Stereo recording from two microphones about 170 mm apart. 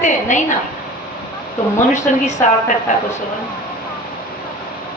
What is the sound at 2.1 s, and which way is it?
Speech, 50° left (ahead or behind).